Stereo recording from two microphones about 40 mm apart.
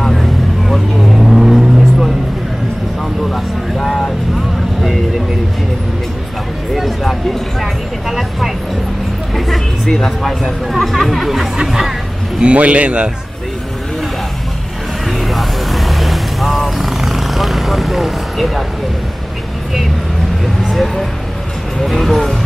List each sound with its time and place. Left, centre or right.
0.1 s vehicle: centre
3.3 s vehicle: centre
6.7 s a sound: centre
8.1 s vehicle: centre
9.8 s speech: centre
11.6 s hubbub: centre
12.4 s a man's voice: right
15.0 s vehicle: centre
20.7 s speech: centre